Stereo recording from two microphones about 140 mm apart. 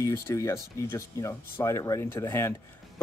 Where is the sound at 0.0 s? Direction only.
20° left (ahead or behind).